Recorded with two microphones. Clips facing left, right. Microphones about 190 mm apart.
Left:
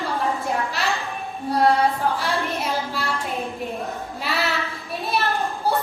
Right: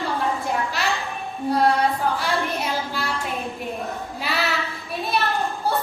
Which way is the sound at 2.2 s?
Centre (ahead or behind).